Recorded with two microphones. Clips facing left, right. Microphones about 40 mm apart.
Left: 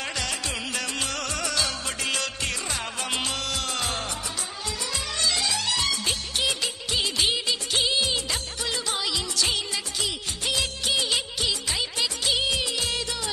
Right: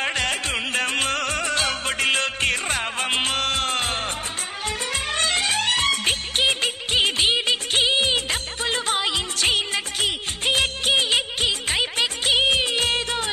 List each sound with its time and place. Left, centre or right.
0.0 s music: right